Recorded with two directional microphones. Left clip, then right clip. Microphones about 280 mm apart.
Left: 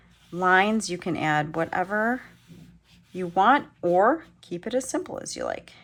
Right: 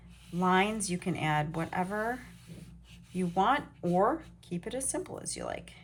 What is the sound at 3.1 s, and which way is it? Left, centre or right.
Speech, centre.